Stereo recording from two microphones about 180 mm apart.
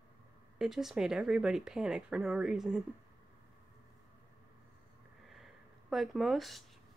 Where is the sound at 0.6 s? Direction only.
Centre (ahead or behind).